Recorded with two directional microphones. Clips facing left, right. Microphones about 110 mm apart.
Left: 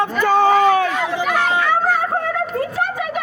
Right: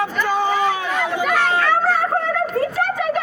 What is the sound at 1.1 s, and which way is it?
Chatter, 5° left (ahead or behind).